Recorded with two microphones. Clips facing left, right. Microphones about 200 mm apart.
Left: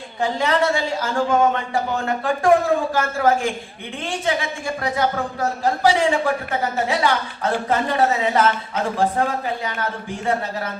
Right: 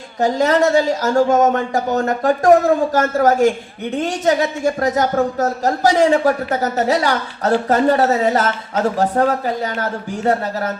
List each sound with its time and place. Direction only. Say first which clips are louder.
0.2 s a man's voice: right 5 dB; 40° right (ahead or behind)